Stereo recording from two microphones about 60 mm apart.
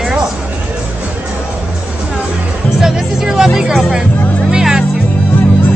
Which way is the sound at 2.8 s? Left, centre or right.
Centre.